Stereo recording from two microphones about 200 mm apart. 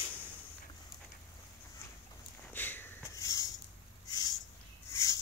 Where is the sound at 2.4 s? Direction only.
10° left (ahead or behind).